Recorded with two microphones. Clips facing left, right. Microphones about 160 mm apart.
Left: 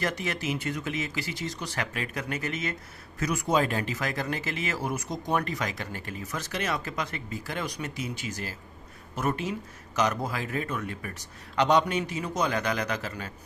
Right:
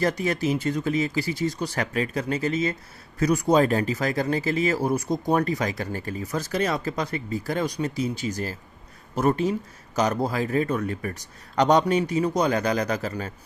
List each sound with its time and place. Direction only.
0.0 s speech: 35° right (ahead or behind)